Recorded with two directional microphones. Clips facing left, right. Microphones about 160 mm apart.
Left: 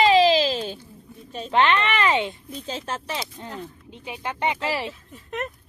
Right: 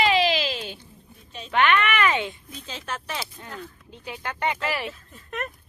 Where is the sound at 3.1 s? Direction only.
20° left (ahead or behind).